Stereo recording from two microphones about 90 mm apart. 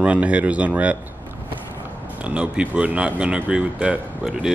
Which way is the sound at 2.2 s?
10° right (ahead or behind).